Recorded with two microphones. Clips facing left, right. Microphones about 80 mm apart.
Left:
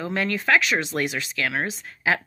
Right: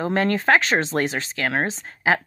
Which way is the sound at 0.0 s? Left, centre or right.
Right.